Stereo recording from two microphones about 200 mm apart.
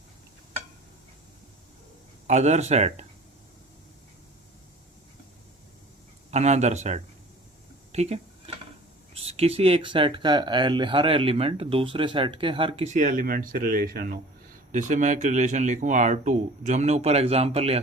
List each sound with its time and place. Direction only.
2.2 s speech: 35° right (ahead or behind)
6.3 s speech: 35° right (ahead or behind)